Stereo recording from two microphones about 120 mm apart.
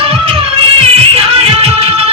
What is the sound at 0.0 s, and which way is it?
Music, 55° right (ahead or behind).